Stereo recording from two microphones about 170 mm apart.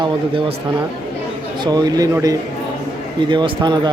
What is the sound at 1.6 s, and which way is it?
Speech, 25° right (ahead or behind).